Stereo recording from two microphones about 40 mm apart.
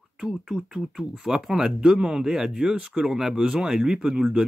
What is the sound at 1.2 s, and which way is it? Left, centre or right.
Speech, centre.